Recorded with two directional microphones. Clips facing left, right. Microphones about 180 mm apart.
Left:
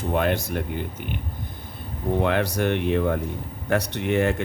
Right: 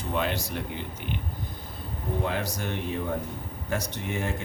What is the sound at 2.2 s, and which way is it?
Speech, 70° left (ahead or behind).